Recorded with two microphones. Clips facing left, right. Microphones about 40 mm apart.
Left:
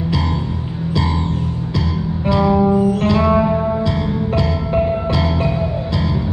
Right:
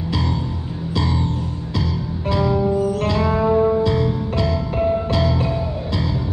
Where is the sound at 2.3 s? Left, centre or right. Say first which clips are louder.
Left 4 dB; left.